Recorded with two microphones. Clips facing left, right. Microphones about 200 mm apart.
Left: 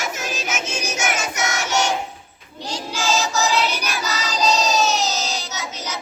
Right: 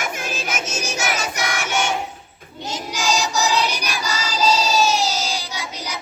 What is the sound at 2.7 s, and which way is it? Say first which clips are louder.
Child singing: even; 15° right (ahead or behind).